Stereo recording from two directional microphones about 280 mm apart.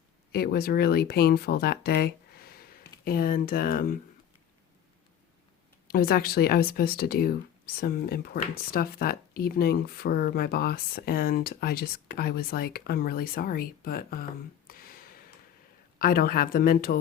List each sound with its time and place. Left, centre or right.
0.3 s speech: left
5.9 s speech: left
14.7 s a sound: left
16.0 s speech: left